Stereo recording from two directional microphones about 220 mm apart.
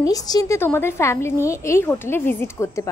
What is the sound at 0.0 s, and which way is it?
A woman's voice, 15° left (ahead or behind).